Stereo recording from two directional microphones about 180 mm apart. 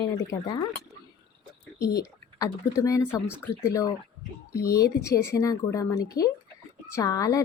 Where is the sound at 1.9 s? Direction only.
20° left (ahead or behind).